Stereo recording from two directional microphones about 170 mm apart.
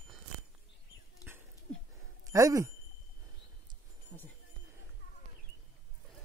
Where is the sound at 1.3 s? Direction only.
10° right (ahead or behind).